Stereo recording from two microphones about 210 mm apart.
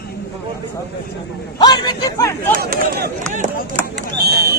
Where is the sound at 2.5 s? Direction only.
45° right (ahead or behind).